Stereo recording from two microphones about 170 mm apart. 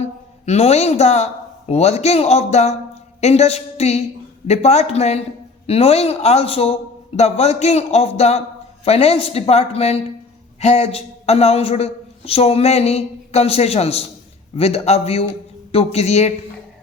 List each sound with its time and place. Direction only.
0.0 s a man's voice: 40° left (ahead or behind)